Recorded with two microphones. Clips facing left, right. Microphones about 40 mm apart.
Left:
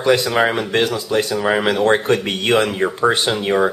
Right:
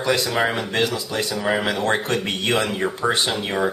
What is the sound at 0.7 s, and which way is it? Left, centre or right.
Speech, left.